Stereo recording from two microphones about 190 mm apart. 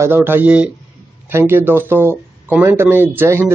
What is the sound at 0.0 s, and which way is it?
A man's voice, 10° right (ahead or behind).